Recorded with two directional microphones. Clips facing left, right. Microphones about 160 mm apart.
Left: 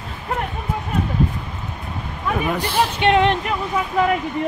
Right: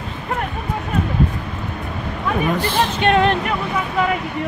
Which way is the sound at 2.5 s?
10° left (ahead or behind).